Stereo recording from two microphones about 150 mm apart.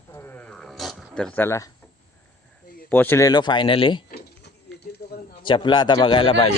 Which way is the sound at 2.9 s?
15° left (ahead or behind).